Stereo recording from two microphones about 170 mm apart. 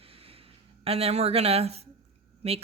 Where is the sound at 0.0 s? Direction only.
35° right (ahead or behind).